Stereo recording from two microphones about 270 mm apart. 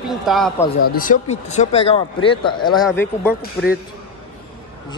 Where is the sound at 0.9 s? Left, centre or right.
Left; by 3.3 s centre.